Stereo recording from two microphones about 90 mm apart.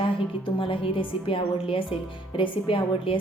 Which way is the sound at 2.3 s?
70° left (ahead or behind).